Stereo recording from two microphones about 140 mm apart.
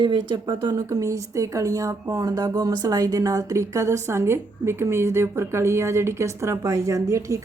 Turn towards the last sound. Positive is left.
turn(degrees=-20)  # may be behind; listen again after turning